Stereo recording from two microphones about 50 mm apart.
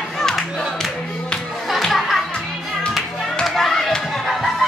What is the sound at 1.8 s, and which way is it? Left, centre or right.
Music, centre.